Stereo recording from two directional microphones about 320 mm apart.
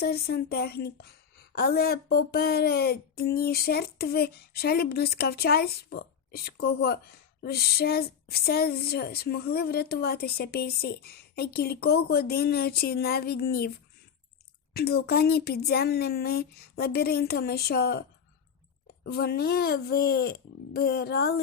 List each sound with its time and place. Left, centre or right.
0.0 s speech: left
19.0 s speech: left